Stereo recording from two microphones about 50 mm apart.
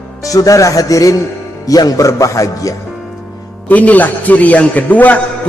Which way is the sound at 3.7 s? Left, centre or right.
Left.